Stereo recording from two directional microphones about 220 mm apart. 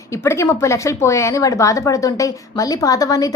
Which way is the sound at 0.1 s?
10° left (ahead or behind).